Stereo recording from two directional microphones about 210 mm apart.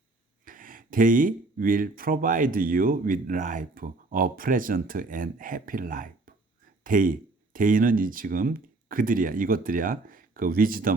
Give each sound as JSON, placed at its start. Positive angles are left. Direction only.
{"t": 0.4, "sound": "speech", "side_deg": -40}